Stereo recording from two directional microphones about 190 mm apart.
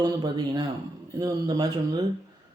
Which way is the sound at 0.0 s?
25° right (ahead or behind).